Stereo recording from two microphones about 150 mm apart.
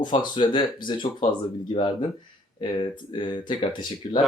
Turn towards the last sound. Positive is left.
turn(degrees=40)  # may be behind; listen again after turning